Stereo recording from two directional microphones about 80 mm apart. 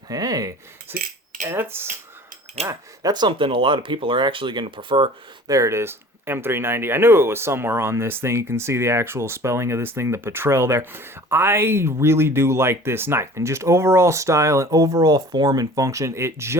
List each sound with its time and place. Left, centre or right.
0.1 s cutlery: right
0.9 s speech: right
3.0 s speech: right
5.5 s speech: right